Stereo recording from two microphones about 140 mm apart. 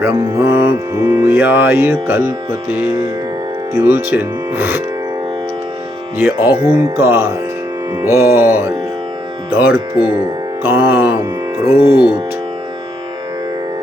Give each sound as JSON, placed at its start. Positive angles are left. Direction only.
{"t": 0.0, "sound": "music", "side_deg": -25}
{"t": 1.2, "sound": "speech", "side_deg": -15}
{"t": 2.8, "sound": "music", "side_deg": -20}
{"t": 3.8, "sound": "speech", "side_deg": -15}
{"t": 6.1, "sound": "speech", "side_deg": -15}
{"t": 8.0, "sound": "music", "side_deg": -20}
{"t": 9.5, "sound": "speech", "side_deg": -15}
{"t": 10.1, "sound": "music", "side_deg": -15}
{"t": 11.5, "sound": "speech", "side_deg": -15}